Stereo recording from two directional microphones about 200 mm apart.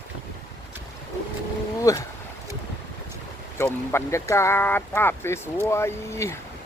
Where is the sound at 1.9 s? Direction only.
15° left (ahead or behind).